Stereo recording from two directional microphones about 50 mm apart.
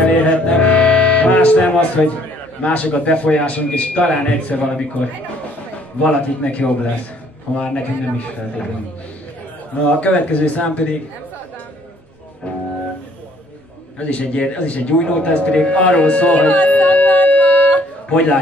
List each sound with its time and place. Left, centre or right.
0.0 s music: left
2.6 s a man's voice: left
9.9 s a man's voice: left
13.9 s a man's voice: left